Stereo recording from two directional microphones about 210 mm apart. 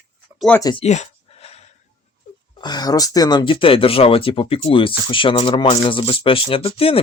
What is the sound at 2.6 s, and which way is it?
Speech, 20° left (ahead or behind).